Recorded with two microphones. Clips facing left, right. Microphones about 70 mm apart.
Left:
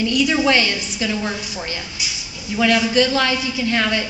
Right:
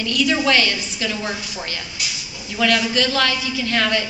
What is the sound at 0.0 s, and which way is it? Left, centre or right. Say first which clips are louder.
A man's voice: left 2 dB; centre.